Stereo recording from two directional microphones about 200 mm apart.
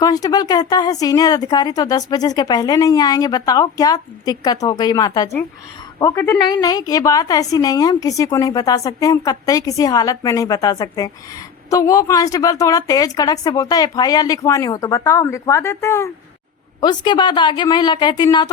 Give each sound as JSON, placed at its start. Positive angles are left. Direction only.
{"t": 0.0, "sound": "a woman's voice", "side_deg": 20}